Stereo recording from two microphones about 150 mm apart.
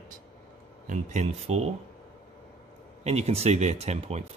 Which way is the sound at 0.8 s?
50° right (ahead or behind).